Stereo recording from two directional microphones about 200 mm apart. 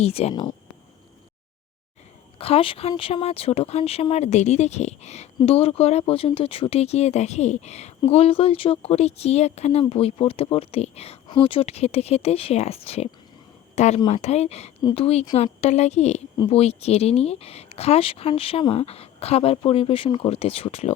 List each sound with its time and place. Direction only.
0.0 s speech: 30° left (ahead or behind)
2.4 s speech: 30° left (ahead or behind)